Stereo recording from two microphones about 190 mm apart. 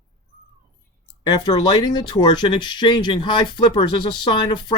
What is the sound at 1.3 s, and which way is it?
Speech, 20° left (ahead or behind).